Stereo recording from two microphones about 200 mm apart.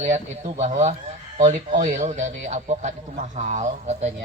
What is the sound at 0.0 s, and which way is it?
Speech, 35° right (ahead or behind).